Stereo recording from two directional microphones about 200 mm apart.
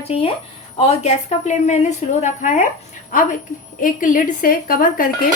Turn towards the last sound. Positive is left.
turn(degrees=45)  # may be behind; listen again after turning